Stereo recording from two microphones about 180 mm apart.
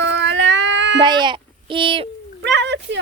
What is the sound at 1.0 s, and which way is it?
Speech, 25° right (ahead or behind).